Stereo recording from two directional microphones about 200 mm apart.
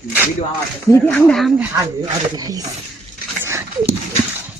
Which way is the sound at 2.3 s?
20° right (ahead or behind).